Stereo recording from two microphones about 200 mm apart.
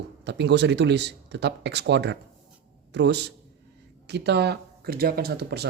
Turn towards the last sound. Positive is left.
turn(degrees=-55)  # may be behind; listen again after turning